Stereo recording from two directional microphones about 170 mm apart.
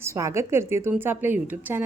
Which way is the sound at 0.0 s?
15° right (ahead or behind).